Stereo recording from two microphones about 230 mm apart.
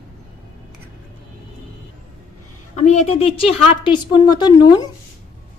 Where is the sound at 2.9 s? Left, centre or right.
Left.